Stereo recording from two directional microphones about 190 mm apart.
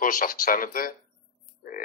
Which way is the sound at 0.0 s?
45° left (ahead or behind).